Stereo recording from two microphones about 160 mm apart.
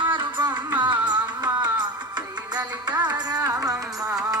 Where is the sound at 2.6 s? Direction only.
25° right (ahead or behind).